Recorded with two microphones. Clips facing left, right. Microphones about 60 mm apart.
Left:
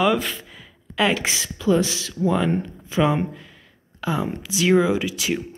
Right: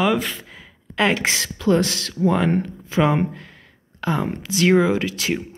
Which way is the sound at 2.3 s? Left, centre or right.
Right.